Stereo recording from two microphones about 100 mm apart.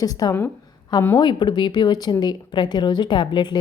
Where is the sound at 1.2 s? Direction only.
50° left (ahead or behind).